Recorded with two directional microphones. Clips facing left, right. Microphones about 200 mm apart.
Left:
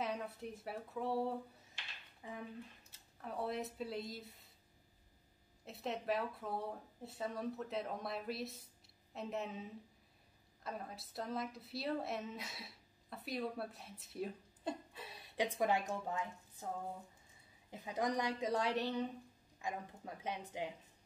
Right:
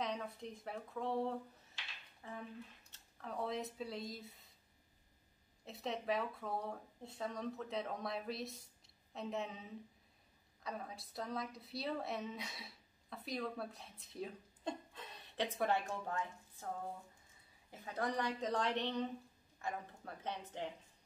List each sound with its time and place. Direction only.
0.0 s a woman's voice: 5° left (ahead or behind)
5.7 s a woman's voice: centre (ahead or behind)